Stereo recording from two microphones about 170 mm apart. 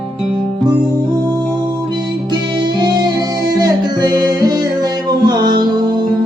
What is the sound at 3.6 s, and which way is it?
Music, 25° right (ahead or behind).